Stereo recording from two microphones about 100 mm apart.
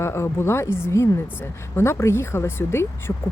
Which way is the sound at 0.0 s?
25° left (ahead or behind).